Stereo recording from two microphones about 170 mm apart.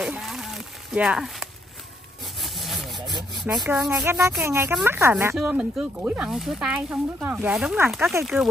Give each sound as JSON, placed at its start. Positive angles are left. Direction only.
{"t": 0.0, "sound": "a sound", "side_deg": 0}
{"t": 2.4, "sound": "sawing", "side_deg": 0}
{"t": 3.5, "sound": "speech", "side_deg": -10}